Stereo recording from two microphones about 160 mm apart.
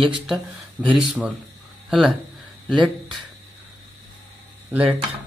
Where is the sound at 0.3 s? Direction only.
5° right (ahead or behind).